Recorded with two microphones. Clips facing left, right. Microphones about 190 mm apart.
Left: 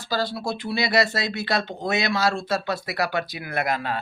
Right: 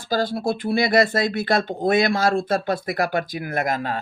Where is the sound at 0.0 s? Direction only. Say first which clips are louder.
Right 4 dB; 50° right (ahead or behind).